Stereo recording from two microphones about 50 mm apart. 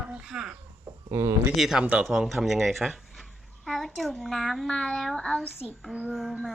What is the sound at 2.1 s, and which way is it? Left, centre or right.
A child's voice, centre.